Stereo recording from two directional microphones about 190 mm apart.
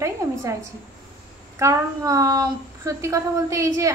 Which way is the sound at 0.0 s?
15° right (ahead or behind).